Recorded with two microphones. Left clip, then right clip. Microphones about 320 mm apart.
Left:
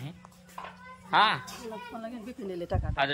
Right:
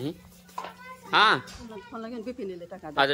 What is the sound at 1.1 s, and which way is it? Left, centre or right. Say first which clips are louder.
A woman's voice: right 3 dB; centre.